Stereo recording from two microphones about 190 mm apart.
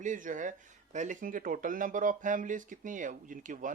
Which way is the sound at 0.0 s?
40° right (ahead or behind).